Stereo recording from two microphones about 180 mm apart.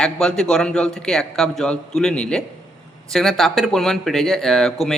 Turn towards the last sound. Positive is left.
turn(degrees=0)  # may be behind; listen again after turning